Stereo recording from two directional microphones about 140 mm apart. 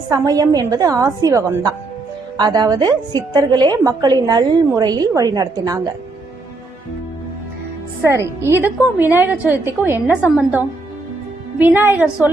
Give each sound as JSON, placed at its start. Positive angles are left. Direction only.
{"t": 0.1, "sound": "a woman's voice", "side_deg": -25}
{"t": 8.0, "sound": "a woman's voice", "side_deg": -20}
{"t": 11.6, "sound": "a woman's voice", "side_deg": -15}